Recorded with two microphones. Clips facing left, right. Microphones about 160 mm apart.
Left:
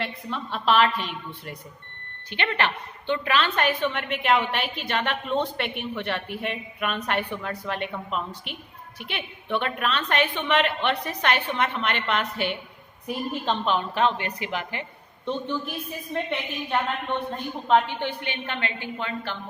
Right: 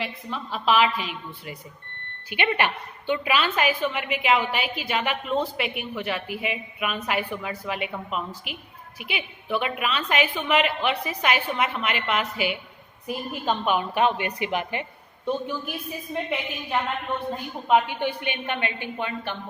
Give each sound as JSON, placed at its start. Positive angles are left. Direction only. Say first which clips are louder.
{"t": 0.0, "sound": "a woman's voice", "louder": "left 1 dB", "side_deg": 0}
{"t": 2.3, "sound": "a woman's voice", "louder": "right 2 dB", "side_deg": -10}